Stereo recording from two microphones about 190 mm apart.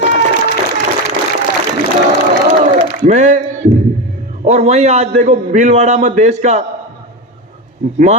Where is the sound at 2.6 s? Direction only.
40° right (ahead or behind).